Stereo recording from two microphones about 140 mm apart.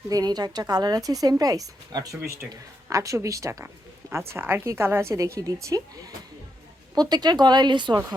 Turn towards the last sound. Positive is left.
turn(degrees=-35)  # may be behind; listen again after turning